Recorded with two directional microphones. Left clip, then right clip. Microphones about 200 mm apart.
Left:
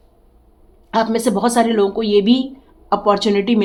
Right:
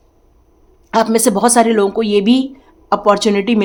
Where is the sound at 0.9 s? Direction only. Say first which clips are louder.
Right 4 dB; 30° right (ahead or behind).